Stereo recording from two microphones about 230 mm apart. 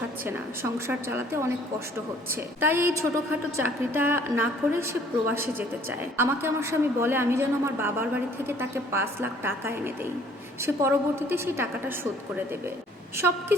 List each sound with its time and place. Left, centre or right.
0.3 s a woman's voice: centre